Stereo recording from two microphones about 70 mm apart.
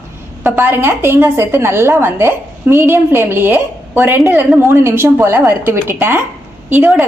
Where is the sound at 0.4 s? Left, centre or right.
Right.